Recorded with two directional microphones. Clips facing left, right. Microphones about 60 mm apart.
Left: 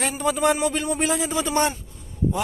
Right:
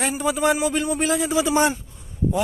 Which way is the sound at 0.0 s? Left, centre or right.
Centre.